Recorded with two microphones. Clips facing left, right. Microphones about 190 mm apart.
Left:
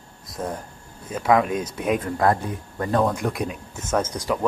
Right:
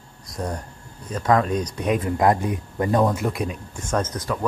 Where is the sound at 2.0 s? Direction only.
15° right (ahead or behind).